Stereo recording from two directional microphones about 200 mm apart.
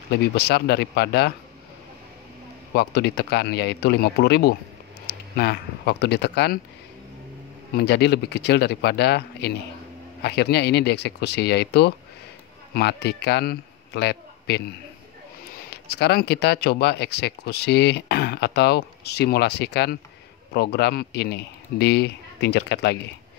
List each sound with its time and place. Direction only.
0.1 s speech: 55° left (ahead or behind)
2.7 s speech: 55° left (ahead or behind)
7.7 s a man's voice: 55° left (ahead or behind)